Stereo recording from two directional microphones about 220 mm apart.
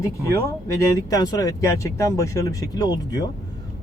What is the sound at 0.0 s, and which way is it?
Speech, 15° left (ahead or behind).